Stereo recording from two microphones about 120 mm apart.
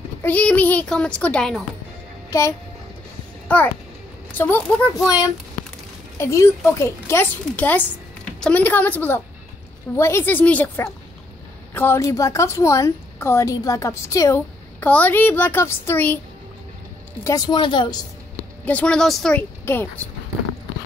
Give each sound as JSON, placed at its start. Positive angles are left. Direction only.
{"t": 0.2, "sound": "a woman's voice", "side_deg": 10}
{"t": 2.3, "sound": "a woman's voice", "side_deg": 25}
{"t": 3.5, "sound": "a child's voice", "side_deg": 10}
{"t": 4.9, "sound": "a woman's voice", "side_deg": 30}
{"t": 11.7, "sound": "a woman's voice", "side_deg": 20}
{"t": 14.8, "sound": "a woman's voice", "side_deg": 15}
{"t": 17.2, "sound": "speech", "side_deg": 30}
{"t": 18.7, "sound": "a woman's voice", "side_deg": 10}
{"t": 19.6, "sound": "speech", "side_deg": 15}